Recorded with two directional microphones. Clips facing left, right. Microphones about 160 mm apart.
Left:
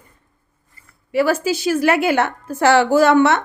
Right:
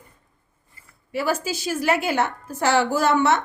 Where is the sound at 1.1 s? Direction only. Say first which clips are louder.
Left 7 dB; 75° left (ahead or behind).